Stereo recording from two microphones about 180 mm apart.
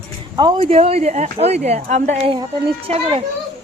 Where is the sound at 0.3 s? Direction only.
25° right (ahead or behind).